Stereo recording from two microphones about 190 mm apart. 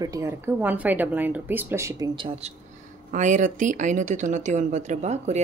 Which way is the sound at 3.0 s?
40° right (ahead or behind).